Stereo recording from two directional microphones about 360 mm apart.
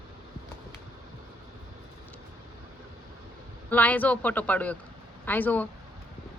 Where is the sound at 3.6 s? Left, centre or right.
Centre.